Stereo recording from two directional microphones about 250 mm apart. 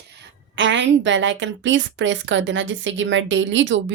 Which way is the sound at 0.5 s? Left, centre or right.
Right.